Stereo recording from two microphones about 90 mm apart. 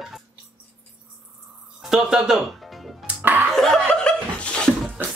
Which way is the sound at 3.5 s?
5° left (ahead or behind).